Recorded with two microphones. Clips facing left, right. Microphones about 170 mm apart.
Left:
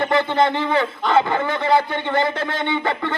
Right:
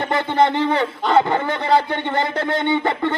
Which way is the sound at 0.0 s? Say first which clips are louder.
Even; 25° right (ahead or behind).